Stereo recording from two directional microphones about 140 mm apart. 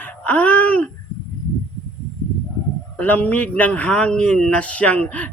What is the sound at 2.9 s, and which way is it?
A man's voice, 10° left (ahead or behind).